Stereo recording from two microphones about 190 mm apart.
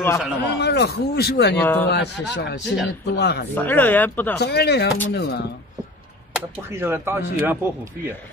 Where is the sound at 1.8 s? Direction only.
60° left (ahead or behind).